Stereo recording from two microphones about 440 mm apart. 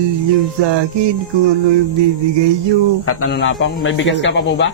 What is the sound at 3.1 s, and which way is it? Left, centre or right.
Speech, left.